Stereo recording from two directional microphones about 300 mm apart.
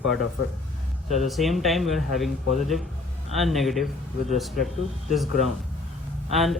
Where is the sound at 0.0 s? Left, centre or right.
Centre.